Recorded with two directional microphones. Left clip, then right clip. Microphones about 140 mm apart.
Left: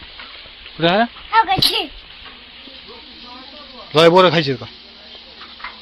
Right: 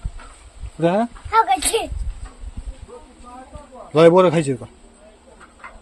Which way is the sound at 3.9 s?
15° right (ahead or behind).